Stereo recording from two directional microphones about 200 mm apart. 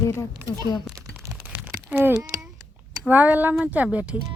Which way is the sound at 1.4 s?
10° right (ahead or behind).